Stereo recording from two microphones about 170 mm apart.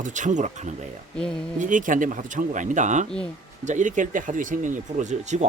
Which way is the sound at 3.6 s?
45° right (ahead or behind).